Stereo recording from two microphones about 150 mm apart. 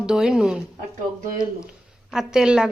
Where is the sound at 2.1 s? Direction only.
5° right (ahead or behind).